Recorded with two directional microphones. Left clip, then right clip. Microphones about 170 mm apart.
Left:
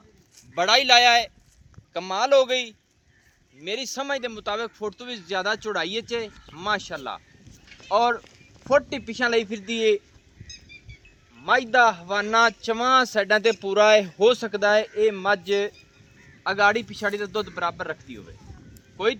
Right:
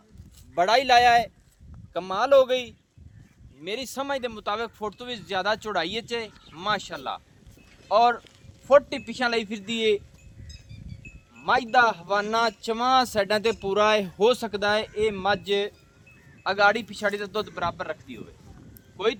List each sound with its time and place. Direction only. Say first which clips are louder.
0.5 s speech: left 2 dB; 40° right (ahead or behind)
1.9 s a man's voice: even; 55° right (ahead or behind); by 7.2 s 90° right
7.7 s a sound: right 1 dB; 90° right
8.6 s speech: right 2 dB; 90° right
11.4 s speech: left 2 dB; 90° right